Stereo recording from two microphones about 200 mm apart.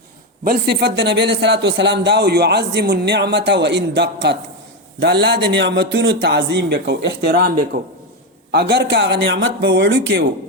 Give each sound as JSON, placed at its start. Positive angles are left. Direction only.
{"t": 0.4, "sound": "a man's voice", "side_deg": -50}
{"t": 7.7, "sound": "a man's voice", "side_deg": -40}
{"t": 8.5, "sound": "a man's voice", "side_deg": -55}